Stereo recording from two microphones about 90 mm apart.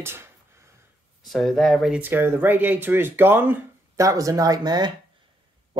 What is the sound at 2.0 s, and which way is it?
Speech, 25° right (ahead or behind).